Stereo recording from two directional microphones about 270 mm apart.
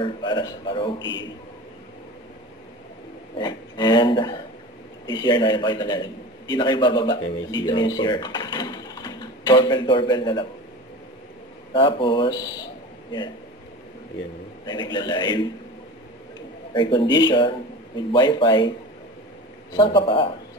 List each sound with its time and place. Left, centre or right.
0.0 s a man's voice: centre
3.3 s a man's voice: centre
11.7 s a man's voice: centre
14.7 s a man's voice: centre
16.7 s a man's voice: centre
19.7 s a man's voice: centre